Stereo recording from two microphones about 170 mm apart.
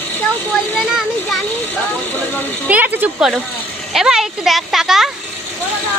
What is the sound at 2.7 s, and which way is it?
A child's voice, 10° right (ahead or behind).